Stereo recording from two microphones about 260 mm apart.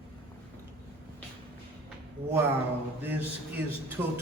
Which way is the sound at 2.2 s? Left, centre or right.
Right.